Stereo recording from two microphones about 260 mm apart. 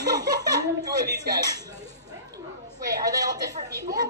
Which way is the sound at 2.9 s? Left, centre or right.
Centre.